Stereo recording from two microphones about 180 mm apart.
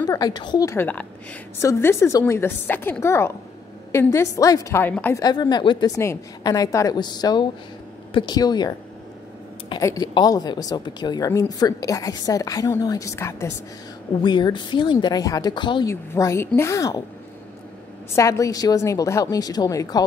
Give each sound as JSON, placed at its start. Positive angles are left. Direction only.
{"t": 0.0, "sound": "a woman's voice", "side_deg": 20}
{"t": 5.2, "sound": "a woman's voice", "side_deg": 25}
{"t": 18.1, "sound": "a woman's voice", "side_deg": 15}